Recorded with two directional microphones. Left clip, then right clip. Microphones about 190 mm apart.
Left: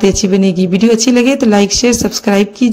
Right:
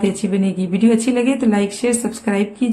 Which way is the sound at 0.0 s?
40° left (ahead or behind).